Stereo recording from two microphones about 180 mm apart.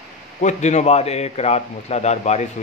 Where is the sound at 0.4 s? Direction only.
40° left (ahead or behind).